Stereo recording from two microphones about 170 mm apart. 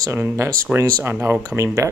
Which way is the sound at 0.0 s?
15° right (ahead or behind).